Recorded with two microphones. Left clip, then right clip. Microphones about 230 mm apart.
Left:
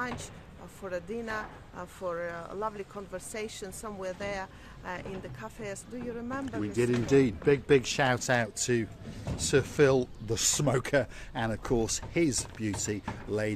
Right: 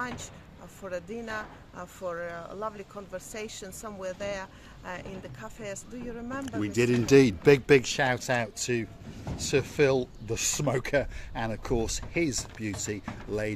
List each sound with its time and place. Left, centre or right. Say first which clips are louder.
0.0 s speech: even; centre
6.6 s speech: right 3 dB; right
7.8 s speech: right 1 dB; centre